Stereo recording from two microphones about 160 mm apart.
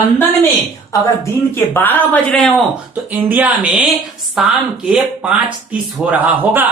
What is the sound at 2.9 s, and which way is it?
Speech, 10° right (ahead or behind).